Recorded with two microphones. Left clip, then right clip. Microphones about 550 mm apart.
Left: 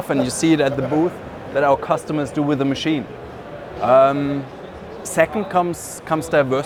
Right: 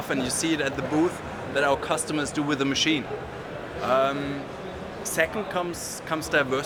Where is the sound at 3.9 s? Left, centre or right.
Left.